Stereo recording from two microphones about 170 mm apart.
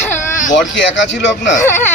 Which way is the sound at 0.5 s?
90° left.